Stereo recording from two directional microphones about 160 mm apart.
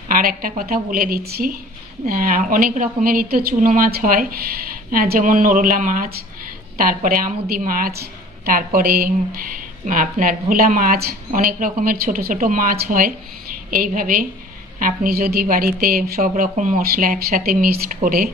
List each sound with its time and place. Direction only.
0.1 s speech: 65° right (ahead or behind)